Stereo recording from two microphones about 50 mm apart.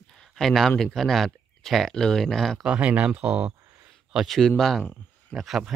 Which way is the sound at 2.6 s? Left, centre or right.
Right.